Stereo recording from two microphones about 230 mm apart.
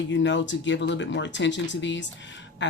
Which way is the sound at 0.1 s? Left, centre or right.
Left.